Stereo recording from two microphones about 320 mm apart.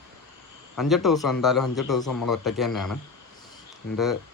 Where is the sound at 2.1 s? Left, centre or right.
Left.